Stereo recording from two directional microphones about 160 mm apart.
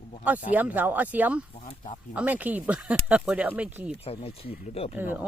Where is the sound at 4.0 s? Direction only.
35° left (ahead or behind).